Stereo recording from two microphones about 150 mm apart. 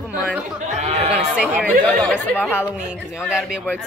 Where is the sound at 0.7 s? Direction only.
45° right (ahead or behind).